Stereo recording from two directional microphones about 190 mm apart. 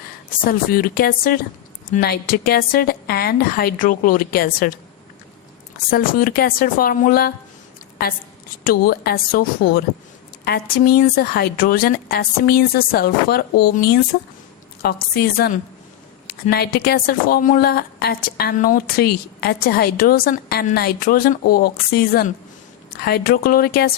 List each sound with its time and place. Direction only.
0.4 s speech: 50° left (ahead or behind)
5.9 s speech: 45° left (ahead or behind)
8.6 s speech: 55° left (ahead or behind)